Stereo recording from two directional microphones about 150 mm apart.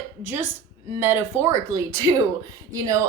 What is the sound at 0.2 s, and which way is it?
Speech, 15° right (ahead or behind).